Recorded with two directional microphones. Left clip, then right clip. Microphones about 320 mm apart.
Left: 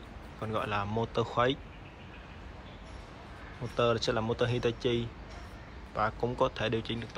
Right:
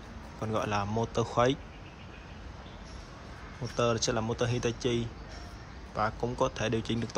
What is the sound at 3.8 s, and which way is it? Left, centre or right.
Speech, centre.